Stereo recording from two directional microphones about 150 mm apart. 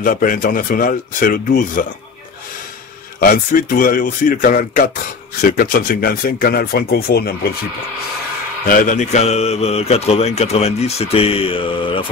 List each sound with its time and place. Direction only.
0.0 s speech: 65° left (ahead or behind)
3.2 s speech: 70° left (ahead or behind); by 7.3 s 90° left
8.6 s speech: 60° left (ahead or behind); by 12.0 s 35° left (ahead or behind)